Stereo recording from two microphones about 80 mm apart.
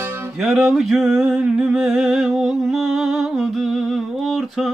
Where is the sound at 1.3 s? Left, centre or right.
Centre.